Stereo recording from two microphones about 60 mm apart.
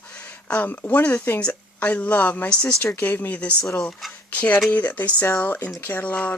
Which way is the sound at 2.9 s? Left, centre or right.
Left.